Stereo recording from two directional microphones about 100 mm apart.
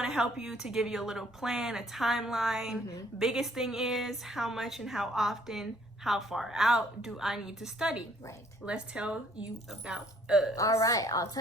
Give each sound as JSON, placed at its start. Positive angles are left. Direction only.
{"t": 0.0, "sound": "a woman's voice", "side_deg": -5}
{"t": 10.5, "sound": "a woman's voice", "side_deg": 35}